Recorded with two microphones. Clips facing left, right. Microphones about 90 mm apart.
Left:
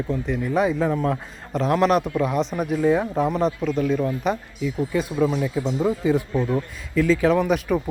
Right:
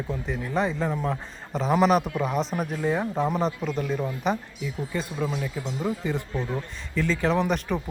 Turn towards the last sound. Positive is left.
turn(degrees=5)  # may be behind; listen again after turning